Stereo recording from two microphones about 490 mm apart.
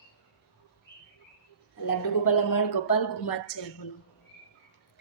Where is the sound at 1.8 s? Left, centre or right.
Left.